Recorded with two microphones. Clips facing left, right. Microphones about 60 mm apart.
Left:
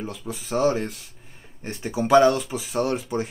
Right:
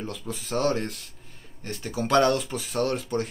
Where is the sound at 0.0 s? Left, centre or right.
Centre.